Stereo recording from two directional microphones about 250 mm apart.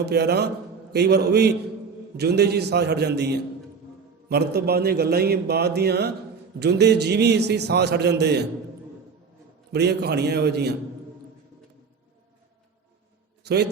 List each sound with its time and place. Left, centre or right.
0.0 s a man's voice: right
9.7 s a man's voice: right
13.4 s a man's voice: right